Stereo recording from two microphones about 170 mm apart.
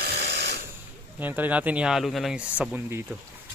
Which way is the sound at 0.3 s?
75° right (ahead or behind).